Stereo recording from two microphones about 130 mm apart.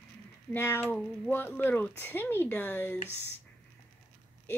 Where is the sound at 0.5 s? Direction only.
15° left (ahead or behind).